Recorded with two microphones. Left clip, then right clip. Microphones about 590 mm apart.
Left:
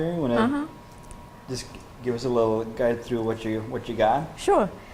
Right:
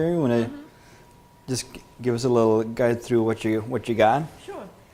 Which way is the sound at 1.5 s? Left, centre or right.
Right.